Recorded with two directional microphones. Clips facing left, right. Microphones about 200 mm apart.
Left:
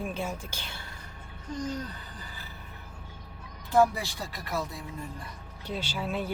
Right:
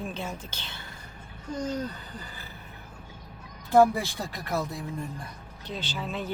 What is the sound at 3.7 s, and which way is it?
Speech, 55° right (ahead or behind).